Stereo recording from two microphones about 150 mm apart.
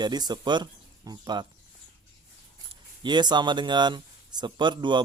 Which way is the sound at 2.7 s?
30° right (ahead or behind).